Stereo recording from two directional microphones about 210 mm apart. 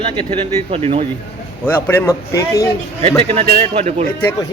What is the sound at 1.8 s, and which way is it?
Speech, 10° left (ahead or behind).